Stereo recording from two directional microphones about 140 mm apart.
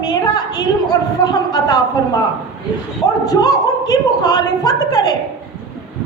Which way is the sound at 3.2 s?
25° left (ahead or behind).